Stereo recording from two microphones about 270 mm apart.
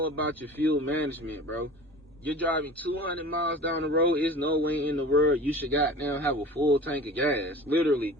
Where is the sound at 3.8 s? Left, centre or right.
Right.